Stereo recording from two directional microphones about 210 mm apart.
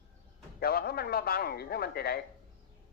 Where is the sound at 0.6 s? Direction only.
45° left (ahead or behind).